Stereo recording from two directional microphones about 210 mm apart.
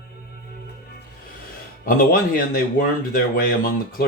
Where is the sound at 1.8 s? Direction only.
45° left (ahead or behind).